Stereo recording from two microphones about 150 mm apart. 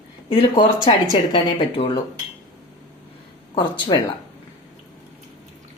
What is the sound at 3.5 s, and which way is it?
Speech, 35° left (ahead or behind).